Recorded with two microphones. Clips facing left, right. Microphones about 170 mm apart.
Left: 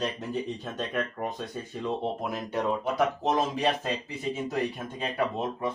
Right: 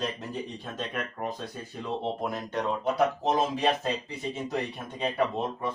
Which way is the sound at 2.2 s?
5° left (ahead or behind).